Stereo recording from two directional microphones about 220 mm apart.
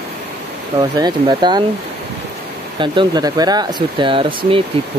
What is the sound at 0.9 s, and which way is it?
Speech, 20° right (ahead or behind).